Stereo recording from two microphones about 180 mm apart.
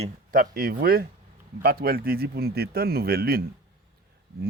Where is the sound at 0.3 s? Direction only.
55° right (ahead or behind).